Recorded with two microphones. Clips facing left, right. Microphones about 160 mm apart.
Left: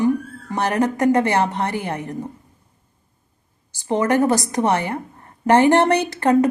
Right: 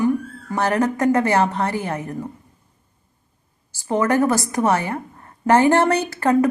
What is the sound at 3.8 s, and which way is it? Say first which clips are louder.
A woman's voice: left 1 dB; 20° left (ahead or behind).